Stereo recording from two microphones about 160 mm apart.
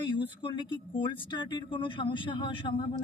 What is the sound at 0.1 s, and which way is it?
Speech, 30° left (ahead or behind).